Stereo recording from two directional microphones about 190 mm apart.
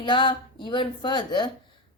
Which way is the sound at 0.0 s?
25° left (ahead or behind).